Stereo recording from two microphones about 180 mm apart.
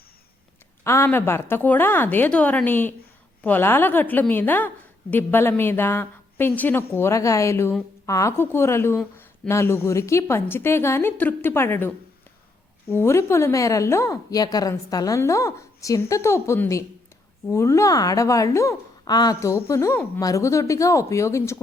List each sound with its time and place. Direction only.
0.9 s a woman's voice: 15° left (ahead or behind)
12.9 s a woman's voice: 15° left (ahead or behind)